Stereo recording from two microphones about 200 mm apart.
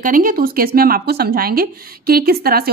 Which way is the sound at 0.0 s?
45° right (ahead or behind).